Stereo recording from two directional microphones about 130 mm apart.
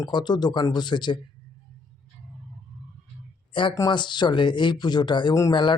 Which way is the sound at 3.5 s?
40° left (ahead or behind).